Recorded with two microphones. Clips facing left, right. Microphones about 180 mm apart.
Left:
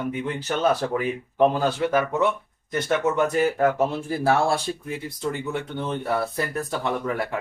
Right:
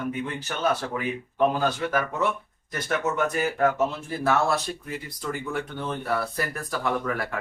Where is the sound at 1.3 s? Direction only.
30° left (ahead or behind).